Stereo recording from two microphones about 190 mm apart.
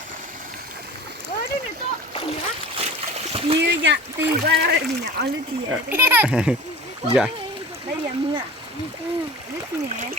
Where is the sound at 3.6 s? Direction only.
70° right (ahead or behind).